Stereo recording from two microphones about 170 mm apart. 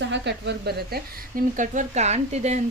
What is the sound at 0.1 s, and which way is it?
A woman's voice, 85° right.